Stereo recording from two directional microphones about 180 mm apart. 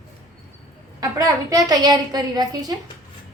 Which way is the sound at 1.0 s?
20° right (ahead or behind).